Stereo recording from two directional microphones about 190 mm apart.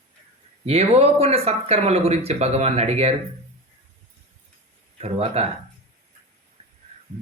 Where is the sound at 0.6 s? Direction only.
35° right (ahead or behind).